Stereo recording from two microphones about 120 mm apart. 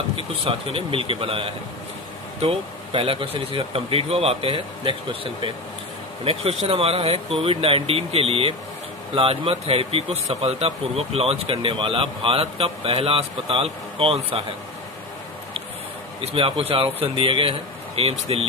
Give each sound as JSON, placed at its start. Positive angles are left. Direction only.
{"t": 0.5, "sound": "speech", "side_deg": -50}
{"t": 16.3, "sound": "speech", "side_deg": -50}